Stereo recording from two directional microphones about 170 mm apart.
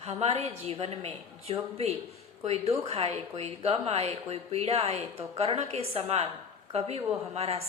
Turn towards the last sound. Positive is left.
turn(degrees=-35)  # may be behind; listen again after turning